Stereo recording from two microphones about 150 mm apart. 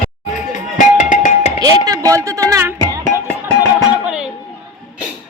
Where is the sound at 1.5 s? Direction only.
25° right (ahead or behind); by 4.3 s 5° right (ahead or behind).